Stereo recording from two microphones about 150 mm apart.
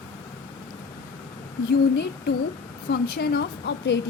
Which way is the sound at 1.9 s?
90° left.